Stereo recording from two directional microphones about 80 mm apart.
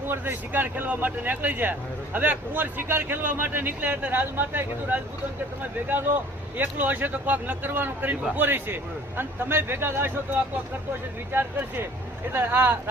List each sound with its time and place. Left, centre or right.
0.1 s speech: right
6.6 s speech: right
11.3 s speech: right